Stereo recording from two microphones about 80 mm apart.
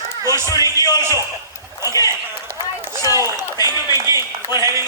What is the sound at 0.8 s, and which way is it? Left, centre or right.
A man's voice, left.